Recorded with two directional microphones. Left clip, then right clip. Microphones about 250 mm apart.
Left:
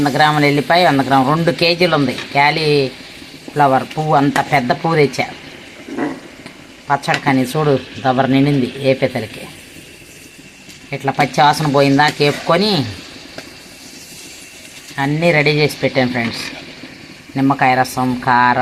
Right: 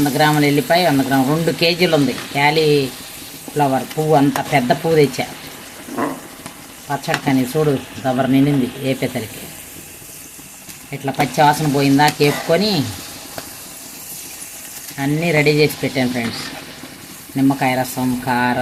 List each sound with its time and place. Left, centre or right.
0.0 s speech: centre
6.9 s speech: centre
11.0 s speech: centre
14.9 s speech: centre
17.3 s speech: centre